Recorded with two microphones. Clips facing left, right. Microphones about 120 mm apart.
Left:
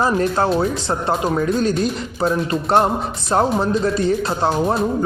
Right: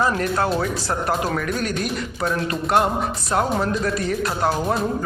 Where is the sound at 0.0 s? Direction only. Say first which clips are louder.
Left 3 dB; 30° left (ahead or behind).